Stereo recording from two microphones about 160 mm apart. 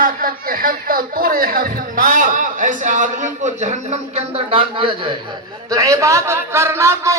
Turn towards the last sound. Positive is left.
turn(degrees=-15)  # may be behind; listen again after turning